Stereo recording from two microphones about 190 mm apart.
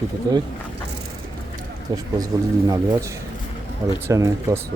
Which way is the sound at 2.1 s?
20° right (ahead or behind).